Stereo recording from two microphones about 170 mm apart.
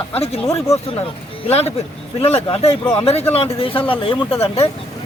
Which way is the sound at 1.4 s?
35° left (ahead or behind).